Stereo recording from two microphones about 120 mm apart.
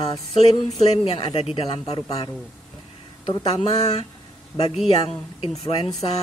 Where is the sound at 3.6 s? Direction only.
60° left (ahead or behind).